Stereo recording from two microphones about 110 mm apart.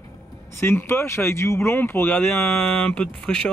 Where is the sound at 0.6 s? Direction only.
20° left (ahead or behind); by 3.5 s 5° left (ahead or behind).